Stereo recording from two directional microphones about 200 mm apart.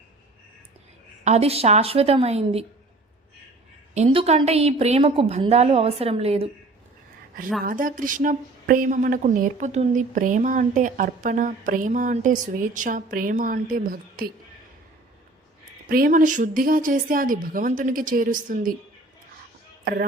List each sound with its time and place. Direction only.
1.2 s a woman's voice: 30° right (ahead or behind)
3.9 s a woman's voice: 30° right (ahead or behind)
7.6 s a woman's voice: 45° right (ahead or behind)
15.9 s a woman's voice: 45° right (ahead or behind)
19.8 s speech: 50° right (ahead or behind)